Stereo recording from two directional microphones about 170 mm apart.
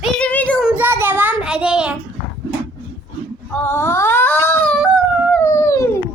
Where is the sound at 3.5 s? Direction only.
10° left (ahead or behind).